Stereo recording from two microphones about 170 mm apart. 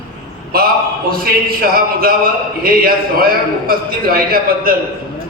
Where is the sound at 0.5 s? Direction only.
60° right (ahead or behind).